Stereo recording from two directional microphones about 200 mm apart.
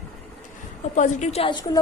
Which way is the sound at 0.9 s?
35° left (ahead or behind).